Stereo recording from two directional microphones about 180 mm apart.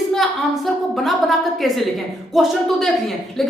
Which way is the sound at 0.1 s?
Centre (ahead or behind).